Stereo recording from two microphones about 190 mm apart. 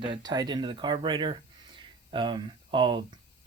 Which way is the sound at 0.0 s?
25° right (ahead or behind).